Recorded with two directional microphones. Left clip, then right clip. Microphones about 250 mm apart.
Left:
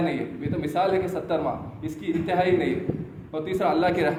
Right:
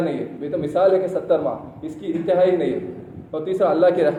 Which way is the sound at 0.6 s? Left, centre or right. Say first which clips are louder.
Right 6 dB; left.